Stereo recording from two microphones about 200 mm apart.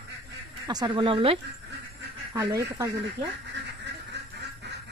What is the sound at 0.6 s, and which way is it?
Speech, 20° right (ahead or behind).